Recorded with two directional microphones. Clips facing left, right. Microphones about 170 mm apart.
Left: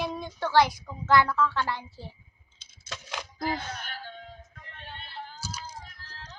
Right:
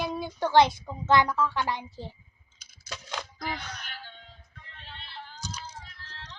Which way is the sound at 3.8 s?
45° left (ahead or behind).